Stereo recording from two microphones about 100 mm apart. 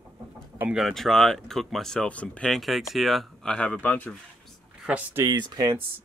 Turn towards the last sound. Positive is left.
turn(degrees=-45)  # may be behind; listen again after turning